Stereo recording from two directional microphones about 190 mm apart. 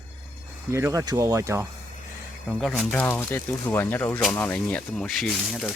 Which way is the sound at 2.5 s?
Centre (ahead or behind).